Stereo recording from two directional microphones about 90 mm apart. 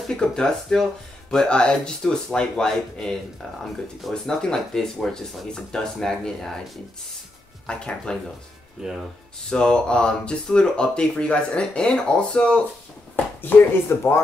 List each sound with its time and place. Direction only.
0.1 s speech: 5° left (ahead or behind)
7.6 s speech: 10° left (ahead or behind)
8.8 s speech: 5° right (ahead or behind)
9.5 s speech: 10° left (ahead or behind)
13.1 s speech: 20° left (ahead or behind)